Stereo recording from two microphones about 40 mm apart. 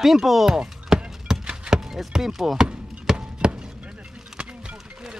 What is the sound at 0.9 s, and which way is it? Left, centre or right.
Clip-clop, centre.